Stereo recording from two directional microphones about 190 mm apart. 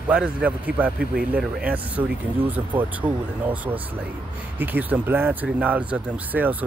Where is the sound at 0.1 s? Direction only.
5° right (ahead or behind).